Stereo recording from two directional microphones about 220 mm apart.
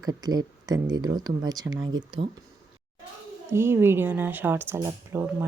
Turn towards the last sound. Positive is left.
turn(degrees=-10)  # may be behind; listen again after turning